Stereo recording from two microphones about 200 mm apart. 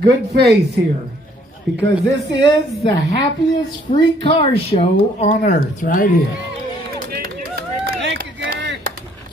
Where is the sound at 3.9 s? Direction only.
25° left (ahead or behind); by 6.1 s 45° left (ahead or behind).